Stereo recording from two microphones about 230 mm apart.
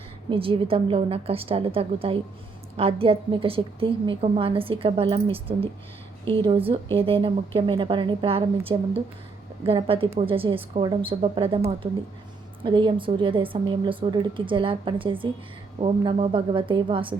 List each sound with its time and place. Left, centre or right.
0.3 s a woman's voice: right